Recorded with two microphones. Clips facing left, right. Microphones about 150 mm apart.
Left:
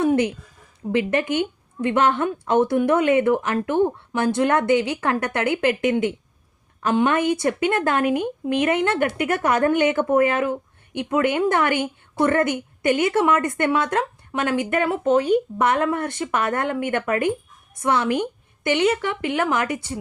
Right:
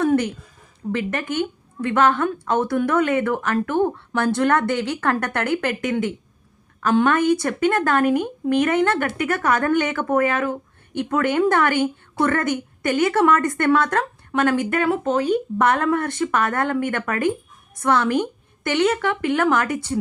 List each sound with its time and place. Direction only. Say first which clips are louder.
0.0 s a sound: even; 15° left (ahead or behind)
0.9 s a woman's voice: left 3 dB; 20° left (ahead or behind)
6.8 s a woman's voice: right 2 dB; 15° left (ahead or behind)
14.4 s speech: right 1 dB; 45° right (ahead or behind)
15.8 s a woman's voice: right 2 dB; 15° left (ahead or behind)